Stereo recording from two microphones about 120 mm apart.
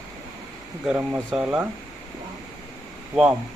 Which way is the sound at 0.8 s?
10° right (ahead or behind).